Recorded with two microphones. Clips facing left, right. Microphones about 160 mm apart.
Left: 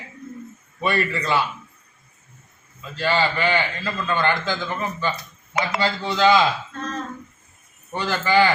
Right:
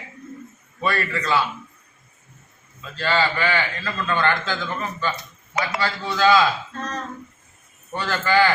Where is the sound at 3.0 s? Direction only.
15° left (ahead or behind).